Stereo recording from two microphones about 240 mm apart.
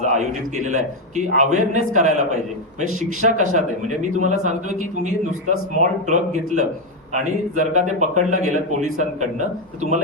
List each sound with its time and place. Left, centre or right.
0.0 s a man's voice: right